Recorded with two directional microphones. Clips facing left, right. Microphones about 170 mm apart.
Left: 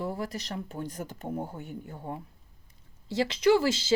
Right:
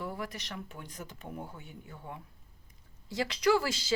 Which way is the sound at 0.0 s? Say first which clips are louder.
Left 5 dB; 35° left (ahead or behind).